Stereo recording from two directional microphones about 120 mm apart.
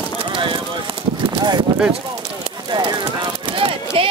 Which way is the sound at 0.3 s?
45° right (ahead or behind).